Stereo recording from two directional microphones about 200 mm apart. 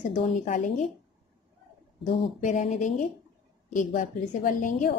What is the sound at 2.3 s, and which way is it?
A woman's voice, 35° left (ahead or behind).